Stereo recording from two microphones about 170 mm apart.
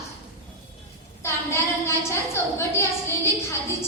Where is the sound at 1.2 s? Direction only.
15° left (ahead or behind).